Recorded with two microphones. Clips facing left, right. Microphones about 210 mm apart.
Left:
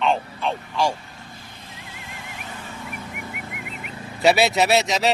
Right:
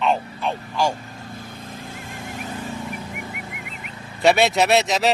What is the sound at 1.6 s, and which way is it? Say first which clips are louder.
Vehicle: right 6 dB; 50° right (ahead or behind).